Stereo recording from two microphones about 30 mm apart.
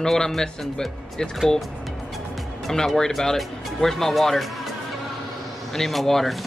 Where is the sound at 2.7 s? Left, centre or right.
Centre.